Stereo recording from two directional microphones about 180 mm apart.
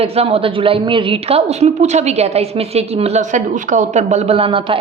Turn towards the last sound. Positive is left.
turn(degrees=-30)  # may be behind; listen again after turning